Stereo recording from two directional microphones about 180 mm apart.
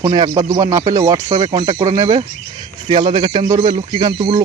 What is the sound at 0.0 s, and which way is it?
Speech, 20° right (ahead or behind).